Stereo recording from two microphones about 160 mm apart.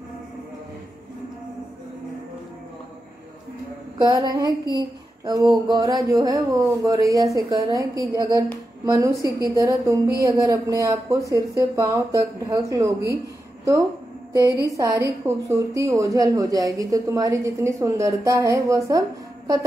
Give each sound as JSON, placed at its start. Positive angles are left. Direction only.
{"t": 4.0, "sound": "a woman's voice", "side_deg": -25}
{"t": 14.4, "sound": "a woman's voice", "side_deg": 20}
{"t": 14.8, "sound": "a woman's voice", "side_deg": -20}